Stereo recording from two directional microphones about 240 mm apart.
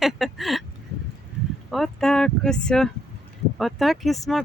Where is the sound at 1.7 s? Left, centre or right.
Centre.